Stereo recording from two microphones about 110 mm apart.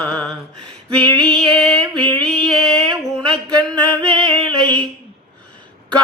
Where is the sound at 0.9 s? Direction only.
10° left (ahead or behind).